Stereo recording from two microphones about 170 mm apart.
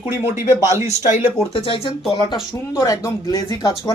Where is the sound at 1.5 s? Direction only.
30° left (ahead or behind).